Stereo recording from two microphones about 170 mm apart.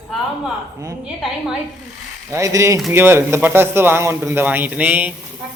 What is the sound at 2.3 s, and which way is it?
Speech, 20° right (ahead or behind).